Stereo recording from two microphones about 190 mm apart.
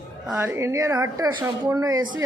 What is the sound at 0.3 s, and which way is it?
A woman's voice, 10° right (ahead or behind).